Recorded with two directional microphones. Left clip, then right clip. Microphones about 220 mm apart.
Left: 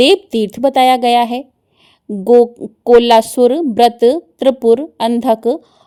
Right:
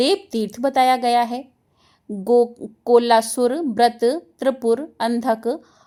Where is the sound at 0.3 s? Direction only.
70° left (ahead or behind).